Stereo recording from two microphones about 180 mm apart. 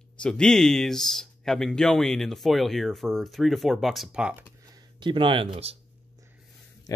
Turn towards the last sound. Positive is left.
turn(degrees=-30)  # may be behind; listen again after turning